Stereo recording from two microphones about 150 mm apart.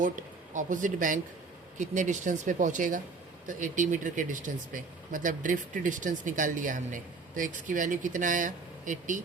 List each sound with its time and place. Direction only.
0.5 s speech: 60° right (ahead or behind)